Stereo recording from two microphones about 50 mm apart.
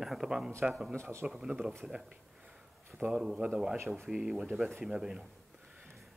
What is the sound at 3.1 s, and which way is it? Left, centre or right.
Speech, centre.